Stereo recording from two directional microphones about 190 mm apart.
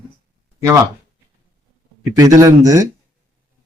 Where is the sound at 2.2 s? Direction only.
15° right (ahead or behind).